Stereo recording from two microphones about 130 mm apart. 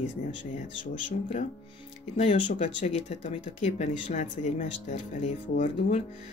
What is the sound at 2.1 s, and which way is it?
Speech, 60° left (ahead or behind).